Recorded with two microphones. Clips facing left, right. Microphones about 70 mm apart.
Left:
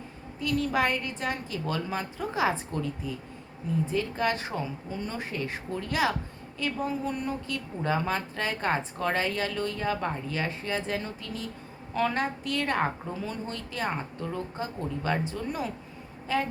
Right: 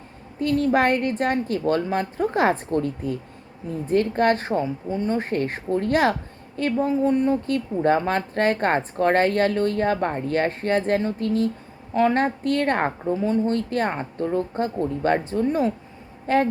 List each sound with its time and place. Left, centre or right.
0.3 s a woman's voice: right
6.7 s a woman's voice: right
7.4 s a woman's voice: right
13.1 s a woman's voice: right
16.2 s speech: right